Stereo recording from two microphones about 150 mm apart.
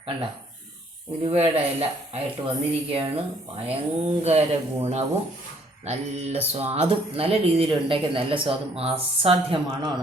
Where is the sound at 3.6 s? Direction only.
40° right (ahead or behind).